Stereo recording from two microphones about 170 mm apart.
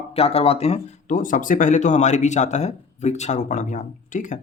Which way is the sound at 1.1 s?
50° left (ahead or behind).